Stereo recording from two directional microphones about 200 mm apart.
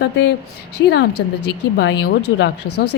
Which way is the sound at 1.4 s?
60° left (ahead or behind).